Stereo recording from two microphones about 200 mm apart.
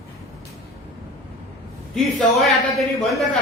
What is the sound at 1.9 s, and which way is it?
A man's voice, centre (ahead or behind).